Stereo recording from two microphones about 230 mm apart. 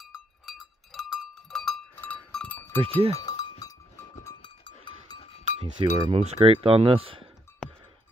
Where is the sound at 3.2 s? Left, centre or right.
Centre.